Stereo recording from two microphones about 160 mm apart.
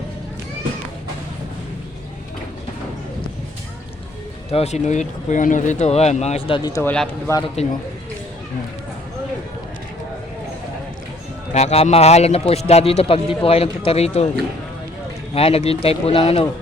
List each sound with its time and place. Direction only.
4.5 s speech: 45° left (ahead or behind)
6.6 s speech: 25° left (ahead or behind)
6.8 s speech: 5° left (ahead or behind)
7.6 s speech: 45° left (ahead or behind)
11.5 s a man's voice: 40° left (ahead or behind)
15.4 s a man's voice: 40° left (ahead or behind)